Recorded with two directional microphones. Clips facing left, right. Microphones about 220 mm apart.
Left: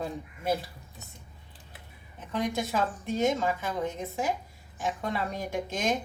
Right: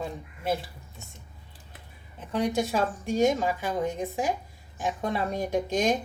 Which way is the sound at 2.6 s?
15° right (ahead or behind).